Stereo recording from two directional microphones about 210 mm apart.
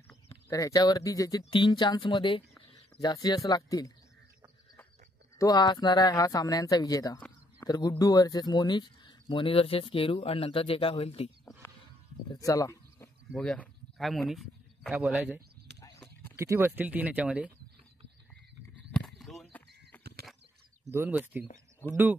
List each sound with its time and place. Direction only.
0.3 s speech: 15° left (ahead or behind)
5.4 s speech: 20° left (ahead or behind)
12.4 s a sound: 15° left (ahead or behind)
13.3 s speech: 5° left (ahead or behind)
15.8 s clip-clop: 10° left (ahead or behind)
16.3 s speech: 10° right (ahead or behind)
18.9 s a sound: 5° left (ahead or behind)
20.0 s a sound: 50° right (ahead or behind)
20.8 s speech: 10° right (ahead or behind)